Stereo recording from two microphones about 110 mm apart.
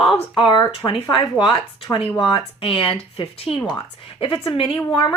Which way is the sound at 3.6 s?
45° left (ahead or behind).